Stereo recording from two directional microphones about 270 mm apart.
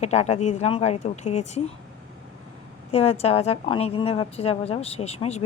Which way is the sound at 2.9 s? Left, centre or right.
Left.